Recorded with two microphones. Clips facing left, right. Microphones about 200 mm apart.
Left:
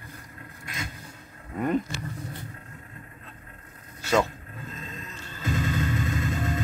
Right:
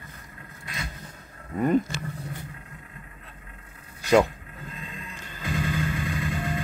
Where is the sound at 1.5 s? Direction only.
Centre (ahead or behind).